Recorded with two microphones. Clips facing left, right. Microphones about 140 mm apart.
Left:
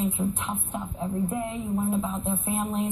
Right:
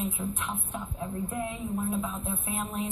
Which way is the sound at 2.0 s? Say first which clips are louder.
Left 5 dB; 20° left (ahead or behind).